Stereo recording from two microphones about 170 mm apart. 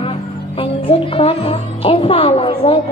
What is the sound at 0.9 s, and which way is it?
A woman's voice, 35° left (ahead or behind).